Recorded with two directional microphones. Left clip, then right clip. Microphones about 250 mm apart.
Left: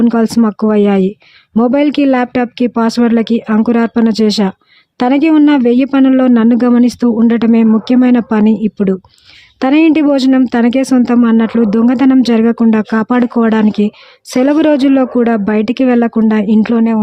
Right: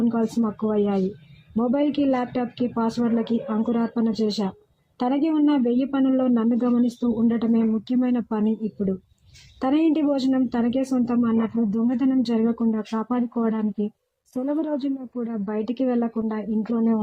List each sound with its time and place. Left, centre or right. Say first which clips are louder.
0.0 s speech: left 12 dB; left